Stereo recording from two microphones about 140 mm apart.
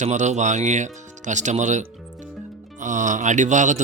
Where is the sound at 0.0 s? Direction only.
55° right (ahead or behind).